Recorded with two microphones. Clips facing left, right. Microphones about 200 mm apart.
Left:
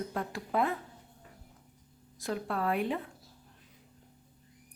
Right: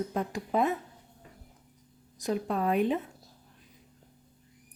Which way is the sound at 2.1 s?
20° right (ahead or behind).